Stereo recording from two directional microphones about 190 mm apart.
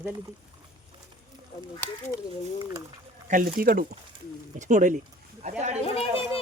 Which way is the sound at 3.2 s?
45° right (ahead or behind).